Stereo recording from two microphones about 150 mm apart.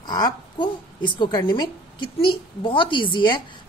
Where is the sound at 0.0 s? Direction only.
30° left (ahead or behind).